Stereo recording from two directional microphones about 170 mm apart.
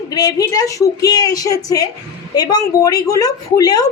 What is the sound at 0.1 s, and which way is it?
A woman's voice, 20° left (ahead or behind).